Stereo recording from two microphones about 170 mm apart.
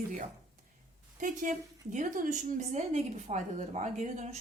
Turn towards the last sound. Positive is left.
turn(degrees=-45)  # may be behind; listen again after turning